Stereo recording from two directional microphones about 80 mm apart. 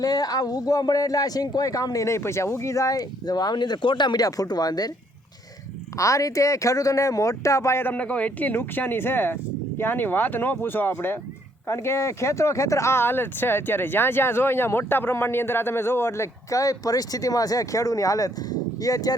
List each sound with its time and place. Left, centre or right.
0.0 s speech: left
6.0 s speech: left
7.9 s speech: centre; by 19.1 s left